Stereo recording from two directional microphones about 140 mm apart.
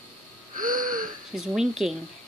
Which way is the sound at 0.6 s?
75° right (ahead or behind).